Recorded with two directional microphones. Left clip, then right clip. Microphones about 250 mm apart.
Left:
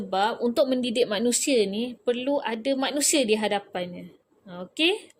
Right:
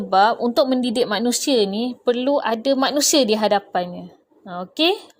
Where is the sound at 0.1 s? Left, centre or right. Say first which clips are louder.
Right 9 dB; right.